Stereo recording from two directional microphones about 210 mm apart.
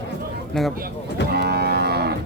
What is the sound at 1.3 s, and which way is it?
Moo, 50° right (ahead or behind).